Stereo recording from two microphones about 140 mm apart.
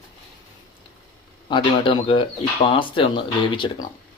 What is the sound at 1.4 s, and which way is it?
Speech, 35° left (ahead or behind).